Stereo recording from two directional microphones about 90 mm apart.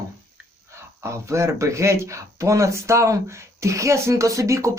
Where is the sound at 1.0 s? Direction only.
30° right (ahead or behind).